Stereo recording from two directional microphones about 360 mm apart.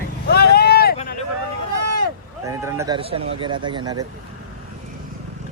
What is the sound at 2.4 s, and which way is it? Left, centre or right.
Speech, centre.